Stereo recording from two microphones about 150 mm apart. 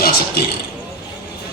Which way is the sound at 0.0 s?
85° left.